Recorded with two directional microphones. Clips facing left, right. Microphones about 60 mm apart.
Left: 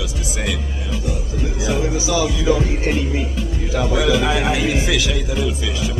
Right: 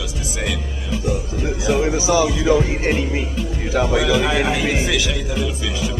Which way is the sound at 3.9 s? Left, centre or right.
Centre.